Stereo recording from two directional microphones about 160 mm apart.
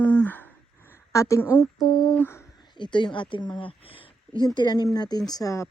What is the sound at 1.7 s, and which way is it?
Speech, centre (ahead or behind).